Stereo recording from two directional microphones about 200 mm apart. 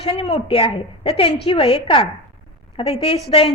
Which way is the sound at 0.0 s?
25° left (ahead or behind).